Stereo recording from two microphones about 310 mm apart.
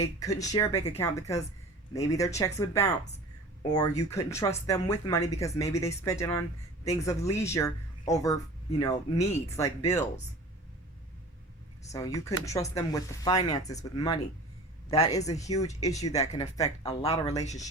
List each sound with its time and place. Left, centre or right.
0.0 s speech: centre
11.9 s a man's voice: centre